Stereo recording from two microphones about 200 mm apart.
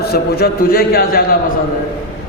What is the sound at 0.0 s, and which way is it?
A man's voice, 50° left (ahead or behind).